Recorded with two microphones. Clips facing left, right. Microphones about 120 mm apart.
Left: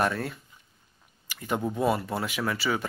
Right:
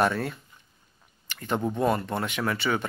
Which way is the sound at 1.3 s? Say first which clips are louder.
Right 1 dB; 10° left (ahead or behind).